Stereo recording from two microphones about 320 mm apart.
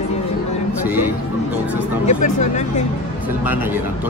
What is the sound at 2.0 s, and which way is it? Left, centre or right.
Speech, left.